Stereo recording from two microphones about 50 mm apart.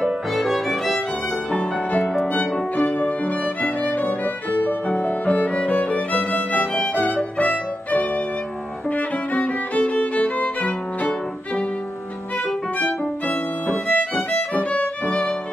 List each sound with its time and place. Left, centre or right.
0.0 s violin: centre
2.7 s music: left
7.3 s violin: left
8.9 s music: left
12.7 s music: left
14.1 s violin: left